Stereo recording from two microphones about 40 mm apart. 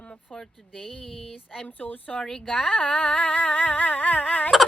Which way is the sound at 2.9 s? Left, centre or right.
Left.